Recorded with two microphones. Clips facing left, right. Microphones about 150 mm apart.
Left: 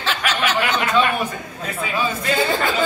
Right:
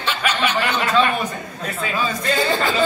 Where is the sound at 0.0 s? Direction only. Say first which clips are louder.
Even; 90° left.